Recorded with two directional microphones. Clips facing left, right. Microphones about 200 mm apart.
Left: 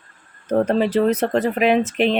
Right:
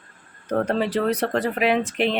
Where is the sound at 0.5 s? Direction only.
20° left (ahead or behind).